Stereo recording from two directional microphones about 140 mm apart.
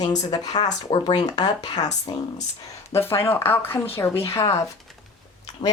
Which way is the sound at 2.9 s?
15° left (ahead or behind).